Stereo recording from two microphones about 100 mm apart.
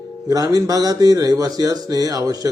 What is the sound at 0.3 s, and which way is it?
Speech, 35° right (ahead or behind).